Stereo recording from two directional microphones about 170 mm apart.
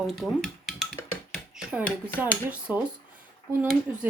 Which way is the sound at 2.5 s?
10° right (ahead or behind).